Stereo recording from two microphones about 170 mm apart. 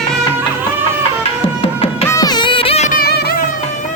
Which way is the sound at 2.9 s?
60° left (ahead or behind).